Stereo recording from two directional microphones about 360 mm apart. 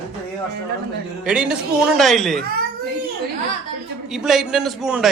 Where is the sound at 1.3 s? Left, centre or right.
Centre.